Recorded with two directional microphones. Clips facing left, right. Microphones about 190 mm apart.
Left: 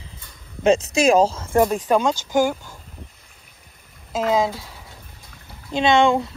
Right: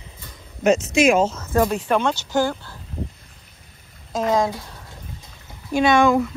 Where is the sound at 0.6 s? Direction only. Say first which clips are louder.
Even; 30° left (ahead or behind).